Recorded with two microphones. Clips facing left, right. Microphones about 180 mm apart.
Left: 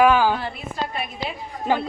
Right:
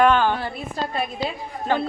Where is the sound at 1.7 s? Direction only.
10° left (ahead or behind).